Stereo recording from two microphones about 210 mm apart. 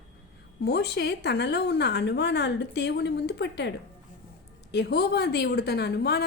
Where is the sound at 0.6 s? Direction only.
50° left (ahead or behind).